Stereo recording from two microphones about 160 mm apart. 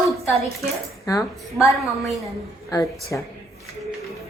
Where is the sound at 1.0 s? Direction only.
20° left (ahead or behind).